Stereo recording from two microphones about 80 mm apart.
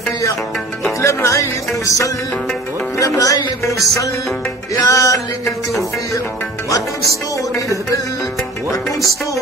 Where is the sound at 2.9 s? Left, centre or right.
Left.